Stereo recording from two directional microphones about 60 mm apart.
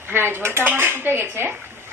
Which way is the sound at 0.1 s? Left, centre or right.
Right.